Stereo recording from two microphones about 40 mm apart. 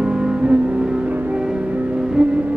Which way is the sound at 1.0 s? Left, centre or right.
Right.